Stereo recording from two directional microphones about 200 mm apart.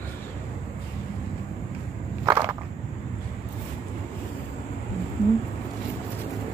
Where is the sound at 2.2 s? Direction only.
15° right (ahead or behind).